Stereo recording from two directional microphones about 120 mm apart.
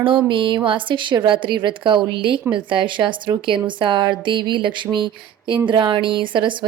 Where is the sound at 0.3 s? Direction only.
45° right (ahead or behind).